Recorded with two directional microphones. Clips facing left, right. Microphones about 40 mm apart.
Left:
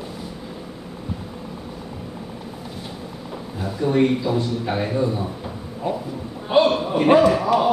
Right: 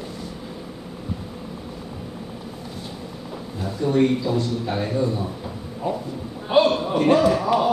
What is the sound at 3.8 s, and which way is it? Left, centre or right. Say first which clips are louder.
Speech: left 1 dB; left.